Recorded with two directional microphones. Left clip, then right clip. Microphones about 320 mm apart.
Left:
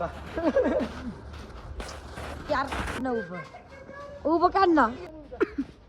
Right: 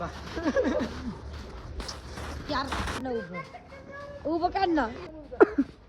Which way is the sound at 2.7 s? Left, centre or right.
Centre.